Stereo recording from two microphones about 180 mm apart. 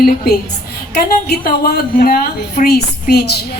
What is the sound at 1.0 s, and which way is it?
A woman's voice, 55° left (ahead or behind).